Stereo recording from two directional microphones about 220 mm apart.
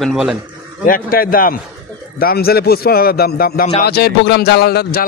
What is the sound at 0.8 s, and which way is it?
A man's voice, 40° left (ahead or behind).